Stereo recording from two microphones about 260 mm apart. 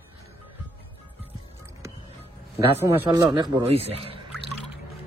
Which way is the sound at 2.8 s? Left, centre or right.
Centre.